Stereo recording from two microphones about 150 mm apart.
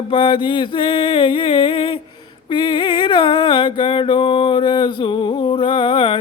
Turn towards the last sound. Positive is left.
turn(degrees=35)  # may be behind; listen again after turning